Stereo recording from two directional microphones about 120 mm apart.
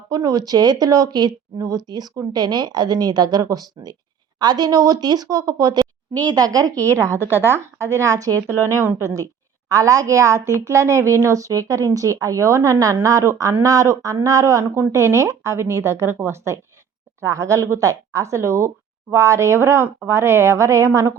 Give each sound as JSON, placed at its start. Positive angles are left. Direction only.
{"t": 0.1, "sound": "speech", "side_deg": -30}
{"t": 7.3, "sound": "a woman's voice", "side_deg": -20}
{"t": 8.5, "sound": "a woman's voice", "side_deg": -20}